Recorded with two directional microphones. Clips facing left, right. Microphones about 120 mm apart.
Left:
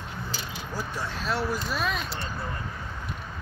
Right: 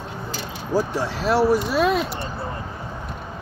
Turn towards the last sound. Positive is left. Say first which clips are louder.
# right 10 dB
turn(degrees=-70)  # may be behind; listen again after turning